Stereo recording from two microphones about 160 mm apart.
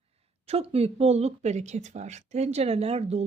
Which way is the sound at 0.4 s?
40° right (ahead or behind).